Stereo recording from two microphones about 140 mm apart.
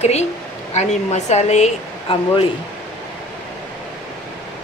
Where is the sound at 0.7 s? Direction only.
55° left (ahead or behind).